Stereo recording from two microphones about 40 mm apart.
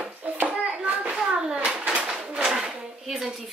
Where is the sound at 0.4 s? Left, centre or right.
Right.